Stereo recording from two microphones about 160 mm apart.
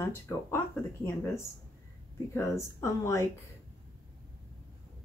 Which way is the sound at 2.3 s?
20° left (ahead or behind).